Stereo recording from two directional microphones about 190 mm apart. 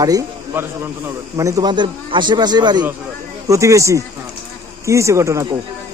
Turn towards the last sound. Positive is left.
turn(degrees=-15)  # may be behind; listen again after turning